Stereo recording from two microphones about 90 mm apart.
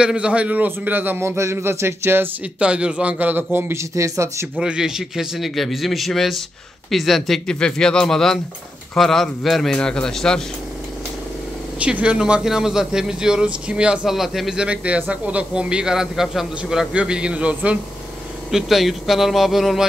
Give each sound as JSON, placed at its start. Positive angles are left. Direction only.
{"t": 0.0, "sound": "a man's voice", "side_deg": -10}
{"t": 2.6, "sound": "a man's voice", "side_deg": -10}
{"t": 3.5, "sound": "speech", "side_deg": -30}
{"t": 4.6, "sound": "a man's voice", "side_deg": -10}
{"t": 11.8, "sound": "a man's voice", "side_deg": -15}
{"t": 18.5, "sound": "a man's voice", "side_deg": -5}